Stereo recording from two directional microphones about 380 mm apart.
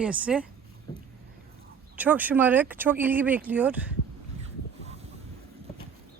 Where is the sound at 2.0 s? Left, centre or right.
Centre.